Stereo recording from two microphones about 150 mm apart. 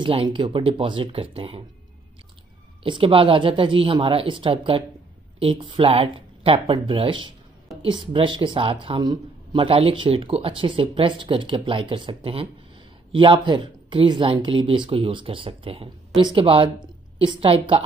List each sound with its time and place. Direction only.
0.0 s speech: 35° right (ahead or behind)
2.8 s speech: 35° right (ahead or behind)